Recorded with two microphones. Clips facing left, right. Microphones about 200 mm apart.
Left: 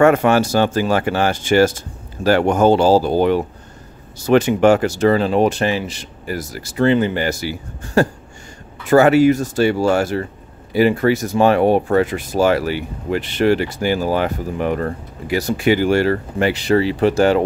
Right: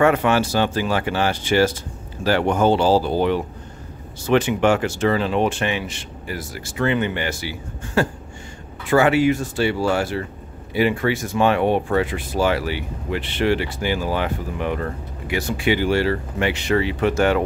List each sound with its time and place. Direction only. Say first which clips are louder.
0.0 s speech: left 4 dB; 45° left (ahead or behind)